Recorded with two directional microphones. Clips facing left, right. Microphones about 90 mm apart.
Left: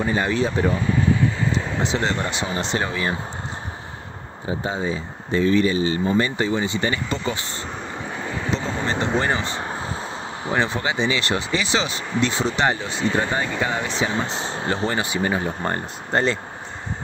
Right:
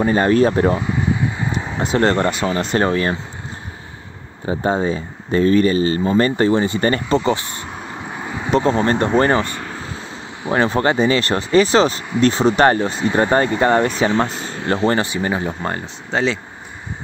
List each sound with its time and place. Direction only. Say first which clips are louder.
0.0 s speech: right 7 dB; 45° right (ahead or behind)
0.7 s vehicle: right 2 dB; 15° right (ahead or behind)
1.8 s speech: right 11 dB; 50° right (ahead or behind)
2.6 s speech: right 7 dB; 45° right (ahead or behind)
4.5 s speech: right 6 dB; 50° right (ahead or behind)
8.1 s vehicle: right 3 dB; 10° right (ahead or behind)
8.5 s speech: right 12 dB; 55° right (ahead or behind)
9.5 s vehicle: left 1 dB; 30° left (ahead or behind)
10.6 s speech: right 8 dB; 40° right (ahead or behind)
12.9 s speech: right 3 dB; 10° right (ahead or behind)
13.2 s speech: right 8 dB; 50° right (ahead or behind)
14.3 s speech: even; 30° left (ahead or behind)
15.2 s speech: right 2 dB; 25° right (ahead or behind)
16.1 s speech: right 2 dB; centre (ahead or behind)